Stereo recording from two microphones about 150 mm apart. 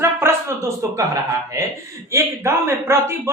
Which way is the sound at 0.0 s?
15° right (ahead or behind).